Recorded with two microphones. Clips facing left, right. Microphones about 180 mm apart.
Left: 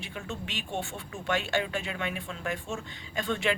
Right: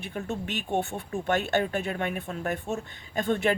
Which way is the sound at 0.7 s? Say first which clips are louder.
Right 7 dB; 55° right (ahead or behind).